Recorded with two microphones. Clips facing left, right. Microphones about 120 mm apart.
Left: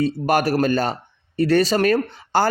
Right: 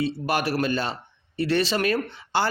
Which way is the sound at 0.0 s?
45° left (ahead or behind).